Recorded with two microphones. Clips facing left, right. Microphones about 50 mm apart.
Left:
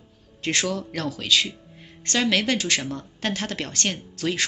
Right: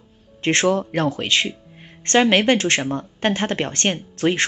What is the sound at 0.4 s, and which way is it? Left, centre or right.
Speech, right.